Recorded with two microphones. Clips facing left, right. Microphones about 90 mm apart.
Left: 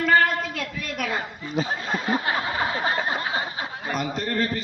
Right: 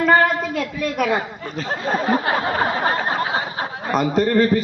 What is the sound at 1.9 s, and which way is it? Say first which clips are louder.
Speech: right 10 dB; 40° right (ahead or behind).